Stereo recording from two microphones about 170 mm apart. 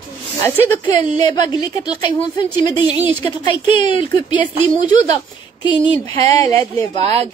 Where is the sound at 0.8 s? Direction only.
25° left (ahead or behind).